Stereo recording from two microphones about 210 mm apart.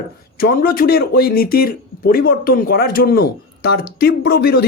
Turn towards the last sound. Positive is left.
turn(degrees=50)  # may be behind; listen again after turning